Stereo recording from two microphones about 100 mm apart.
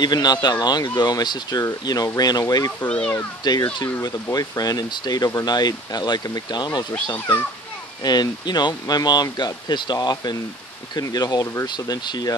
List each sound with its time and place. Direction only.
0.0 s speech: 45° left (ahead or behind)
2.8 s speech: 15° left (ahead or behind)
3.4 s speech: 45° left (ahead or behind)
8.0 s speech: 45° left (ahead or behind)